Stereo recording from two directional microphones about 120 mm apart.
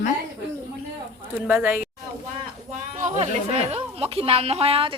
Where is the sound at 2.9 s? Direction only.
90° right.